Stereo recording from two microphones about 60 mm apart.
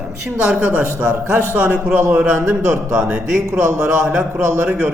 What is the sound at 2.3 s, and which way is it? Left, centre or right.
Speech, right.